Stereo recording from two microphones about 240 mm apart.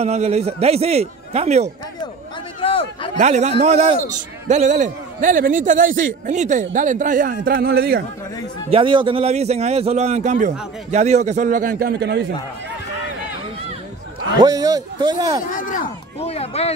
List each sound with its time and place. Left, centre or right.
0.0 s a man's voice: right
2.6 s a sound: left
3.2 s a man's voice: right
8.6 s a man's voice: right
14.4 s a man's voice: centre
15.5 s speech: left